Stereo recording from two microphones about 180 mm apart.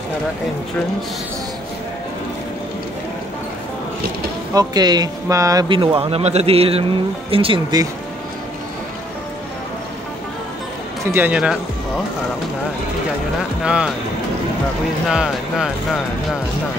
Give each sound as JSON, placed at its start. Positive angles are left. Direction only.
{"t": 4.6, "sound": "speech", "side_deg": -20}
{"t": 11.1, "sound": "speech", "side_deg": -10}
{"t": 13.4, "sound": "speech", "side_deg": -5}
{"t": 15.0, "sound": "speech", "side_deg": 0}